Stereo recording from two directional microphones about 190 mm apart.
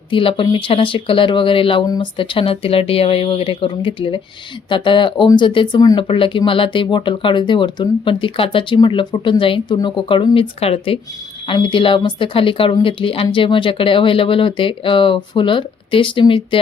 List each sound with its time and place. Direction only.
0.1 s speech: 30° left (ahead or behind)